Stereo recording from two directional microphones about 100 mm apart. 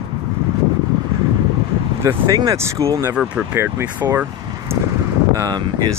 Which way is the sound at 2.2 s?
40° right (ahead or behind).